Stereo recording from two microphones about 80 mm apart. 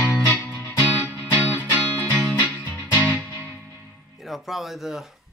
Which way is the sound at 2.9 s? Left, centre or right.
Centre.